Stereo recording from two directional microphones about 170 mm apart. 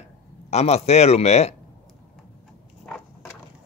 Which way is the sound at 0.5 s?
40° left (ahead or behind).